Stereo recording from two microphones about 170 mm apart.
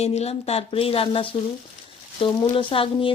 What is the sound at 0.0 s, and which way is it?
A woman's voice, 40° left (ahead or behind).